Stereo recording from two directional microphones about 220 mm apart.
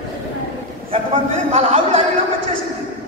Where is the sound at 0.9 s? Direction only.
25° right (ahead or behind).